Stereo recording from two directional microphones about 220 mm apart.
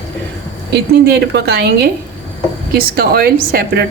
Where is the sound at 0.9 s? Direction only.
50° right (ahead or behind).